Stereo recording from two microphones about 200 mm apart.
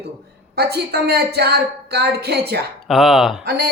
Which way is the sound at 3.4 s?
50° right (ahead or behind).